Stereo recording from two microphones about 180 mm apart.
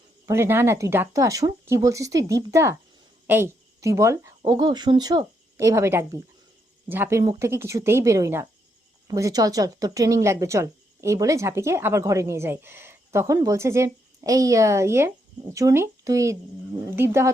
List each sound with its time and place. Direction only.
0.3 s speech: 15° right (ahead or behind)